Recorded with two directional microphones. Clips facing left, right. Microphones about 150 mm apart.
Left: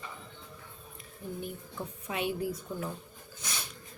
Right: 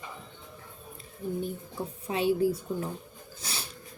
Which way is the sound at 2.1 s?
30° right (ahead or behind).